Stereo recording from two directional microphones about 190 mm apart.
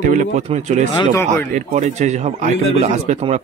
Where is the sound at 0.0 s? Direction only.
40° right (ahead or behind).